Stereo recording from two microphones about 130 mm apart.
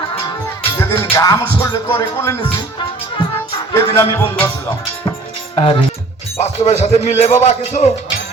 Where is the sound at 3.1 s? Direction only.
40° left (ahead or behind).